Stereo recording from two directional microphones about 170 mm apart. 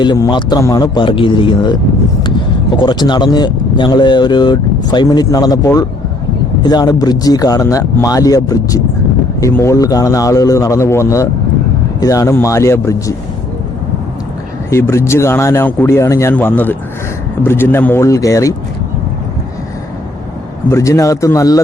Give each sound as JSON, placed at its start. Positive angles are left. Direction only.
{"t": 0.0, "sound": "speech", "side_deg": 25}
{"t": 14.7, "sound": "speech", "side_deg": 15}
{"t": 20.7, "sound": "speech", "side_deg": 15}